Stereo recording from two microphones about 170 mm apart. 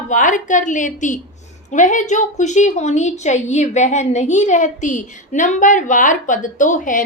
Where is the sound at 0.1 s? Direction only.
50° left (ahead or behind).